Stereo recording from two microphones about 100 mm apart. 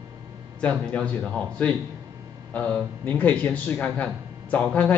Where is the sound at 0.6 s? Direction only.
10° left (ahead or behind).